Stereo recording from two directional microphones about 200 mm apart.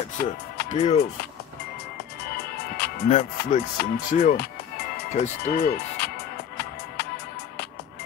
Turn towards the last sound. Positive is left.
turn(degrees=50)  # may be behind; listen again after turning